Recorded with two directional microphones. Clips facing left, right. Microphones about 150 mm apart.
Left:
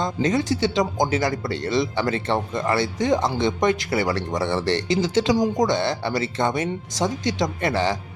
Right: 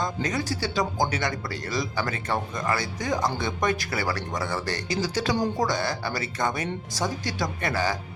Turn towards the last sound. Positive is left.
turn(degrees=25)  # may be behind; listen again after turning